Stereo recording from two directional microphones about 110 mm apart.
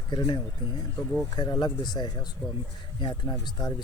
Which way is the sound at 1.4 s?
40° left (ahead or behind).